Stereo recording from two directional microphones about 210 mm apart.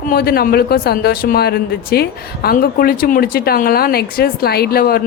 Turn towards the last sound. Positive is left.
turn(degrees=45)  # may be behind; listen again after turning